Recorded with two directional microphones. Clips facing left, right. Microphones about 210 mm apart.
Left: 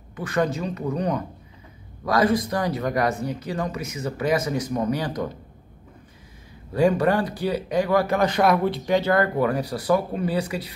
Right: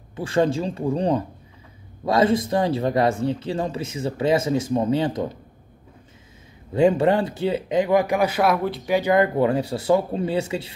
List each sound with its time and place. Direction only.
0.1 s speech: 30° right (ahead or behind)
6.7 s speech: 25° right (ahead or behind)